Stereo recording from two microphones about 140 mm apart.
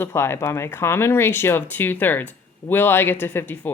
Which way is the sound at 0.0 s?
20° left (ahead or behind).